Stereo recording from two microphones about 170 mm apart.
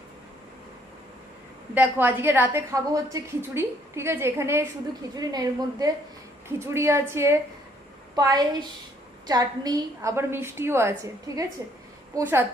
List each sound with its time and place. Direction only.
1.7 s a woman's voice: 10° right (ahead or behind)